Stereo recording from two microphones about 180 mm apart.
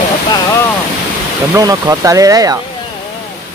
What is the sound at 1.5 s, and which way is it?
Speech, 20° right (ahead or behind).